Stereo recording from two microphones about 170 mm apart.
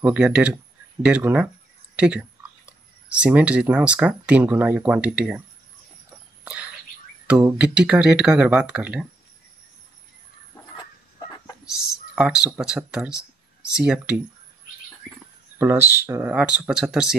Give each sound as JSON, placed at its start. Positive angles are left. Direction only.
{"t": 0.0, "sound": "speech", "side_deg": -5}
{"t": 7.2, "sound": "speech", "side_deg": -10}
{"t": 10.8, "sound": "a sound", "side_deg": 25}
{"t": 11.6, "sound": "speech", "side_deg": -5}
{"t": 15.6, "sound": "speech", "side_deg": -15}